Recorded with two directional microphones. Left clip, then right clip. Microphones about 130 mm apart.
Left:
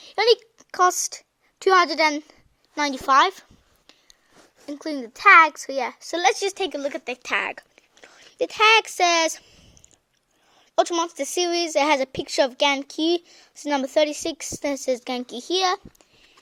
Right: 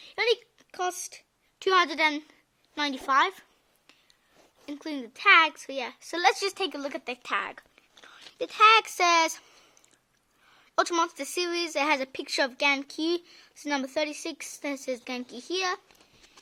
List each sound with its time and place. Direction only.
0.0 s a sound: 45° left (ahead or behind)
1.6 s speech: 30° left (ahead or behind)
4.6 s speech: 25° left (ahead or behind)
8.8 s speech: 15° left (ahead or behind)
10.8 s speech: 15° left (ahead or behind); by 15.8 s 45° left (ahead or behind)